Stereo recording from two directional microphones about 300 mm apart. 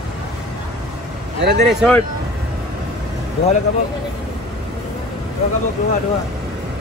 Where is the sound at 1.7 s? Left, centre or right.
Centre.